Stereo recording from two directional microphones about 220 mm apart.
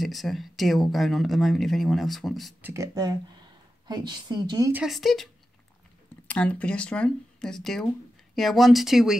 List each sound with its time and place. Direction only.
0.0 s speech: centre (ahead or behind)
2.7 s speech: 15° right (ahead or behind)
4.8 s speech: centre (ahead or behind)